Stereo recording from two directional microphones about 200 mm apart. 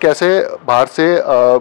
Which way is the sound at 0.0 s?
10° left (ahead or behind).